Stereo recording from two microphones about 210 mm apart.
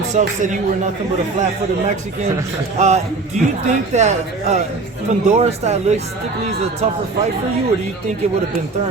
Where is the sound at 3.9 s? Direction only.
35° right (ahead or behind).